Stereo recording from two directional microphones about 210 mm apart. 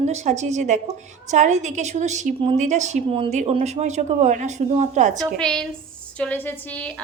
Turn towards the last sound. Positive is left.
turn(degrees=10)  # may be behind; listen again after turning